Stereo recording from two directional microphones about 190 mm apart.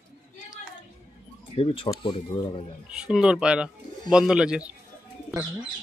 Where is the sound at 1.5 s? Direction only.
30° left (ahead or behind).